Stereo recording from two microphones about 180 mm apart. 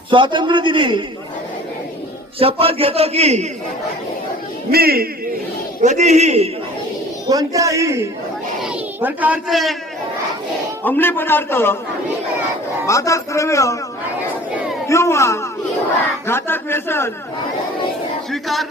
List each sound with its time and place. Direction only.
0.1 s a man's voice: 25° right (ahead or behind)
2.4 s a man's voice: 30° right (ahead or behind)
4.7 s speech: 60° right (ahead or behind)
5.8 s a man's voice: 40° right (ahead or behind)
7.3 s a man's voice: 20° right (ahead or behind); by 9.7 s centre (ahead or behind)
10.8 s a man's voice: 10° left (ahead or behind)
12.9 s a man's voice: 15° left (ahead or behind)
14.8 s a man's voice: 15° left (ahead or behind)
18.3 s battle cry: centre (ahead or behind)